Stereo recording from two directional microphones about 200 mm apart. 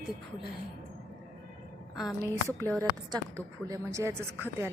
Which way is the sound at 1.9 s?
Centre (ahead or behind).